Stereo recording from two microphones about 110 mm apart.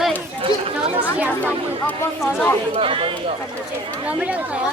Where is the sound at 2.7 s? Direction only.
55° right (ahead or behind).